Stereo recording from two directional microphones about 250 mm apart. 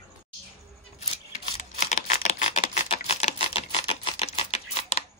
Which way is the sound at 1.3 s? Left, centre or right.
Left.